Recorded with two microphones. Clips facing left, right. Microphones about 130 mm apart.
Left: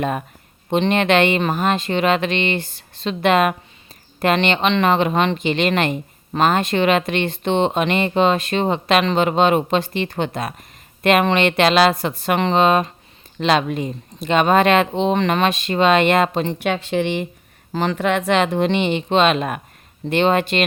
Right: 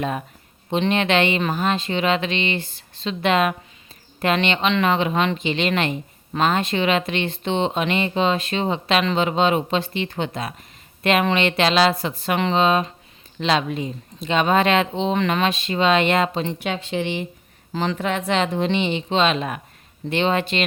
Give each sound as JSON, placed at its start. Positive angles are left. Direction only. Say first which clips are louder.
{"t": 0.7, "sound": "a woman's voice", "louder": "left 3 dB", "side_deg": 55}
{"t": 2.6, "sound": "a woman's voice", "louder": "left 2 dB", "side_deg": 45}